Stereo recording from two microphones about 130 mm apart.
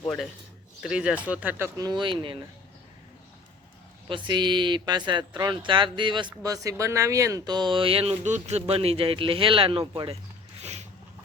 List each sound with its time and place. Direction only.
0.8 s speech: 5° right (ahead or behind)
1.8 s speech: 35° right (ahead or behind)
4.1 s speech: 35° right (ahead or behind)
8.2 s speech: 60° right (ahead or behind); by 10.2 s 40° right (ahead or behind)
10.6 s a sound: 60° right (ahead or behind)